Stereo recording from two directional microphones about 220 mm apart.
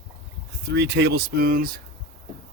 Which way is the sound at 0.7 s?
50° right (ahead or behind).